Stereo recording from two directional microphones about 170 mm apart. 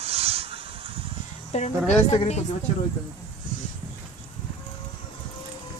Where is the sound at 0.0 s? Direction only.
35° right (ahead or behind).